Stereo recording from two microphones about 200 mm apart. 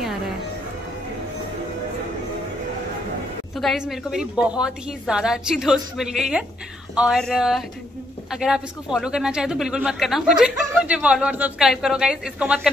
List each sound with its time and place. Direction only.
3.5 s speech: centre (ahead or behind)